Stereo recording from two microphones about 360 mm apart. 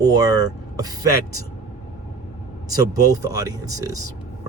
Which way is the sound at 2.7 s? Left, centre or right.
Centre.